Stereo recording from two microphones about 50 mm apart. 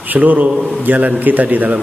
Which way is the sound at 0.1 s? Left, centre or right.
Right.